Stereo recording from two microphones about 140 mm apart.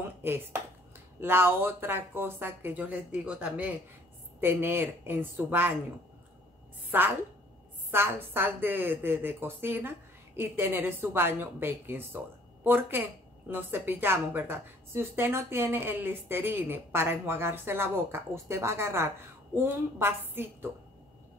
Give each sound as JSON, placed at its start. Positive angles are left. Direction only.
{"t": 0.2, "sound": "a woman's voice", "side_deg": -15}
{"t": 6.9, "sound": "a woman's voice", "side_deg": -15}